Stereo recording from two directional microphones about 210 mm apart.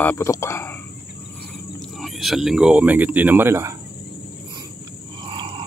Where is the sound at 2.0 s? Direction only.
Centre (ahead or behind).